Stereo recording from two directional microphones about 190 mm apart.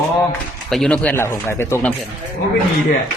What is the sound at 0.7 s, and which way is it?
Speech, 5° left (ahead or behind).